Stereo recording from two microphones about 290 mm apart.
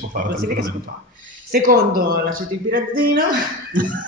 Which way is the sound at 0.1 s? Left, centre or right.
Right.